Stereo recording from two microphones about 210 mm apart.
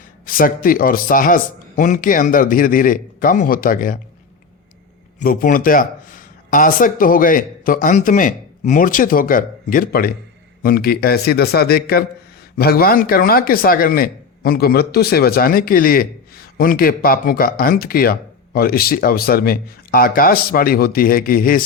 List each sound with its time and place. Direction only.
0.3 s speech: 40° left (ahead or behind)
5.2 s speech: 45° left (ahead or behind)